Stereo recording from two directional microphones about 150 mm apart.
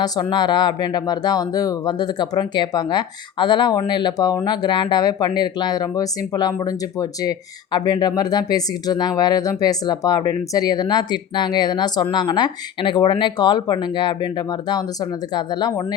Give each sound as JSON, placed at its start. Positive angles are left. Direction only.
{"t": 0.0, "sound": "speech", "side_deg": 30}